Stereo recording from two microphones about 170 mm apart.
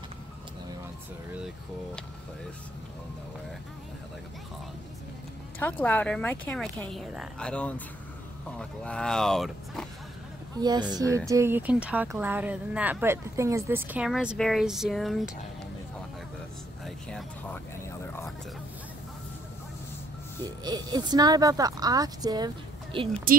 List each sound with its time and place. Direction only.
5.6 s speech: 10° left (ahead or behind)
10.6 s a woman's voice: 25° right (ahead or behind); by 15.3 s centre (ahead or behind)
16.8 s a sound: 5° left (ahead or behind)
20.6 s speech: 25° right (ahead or behind)